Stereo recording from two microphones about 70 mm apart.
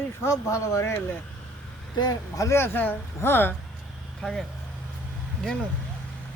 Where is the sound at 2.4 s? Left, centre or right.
Left.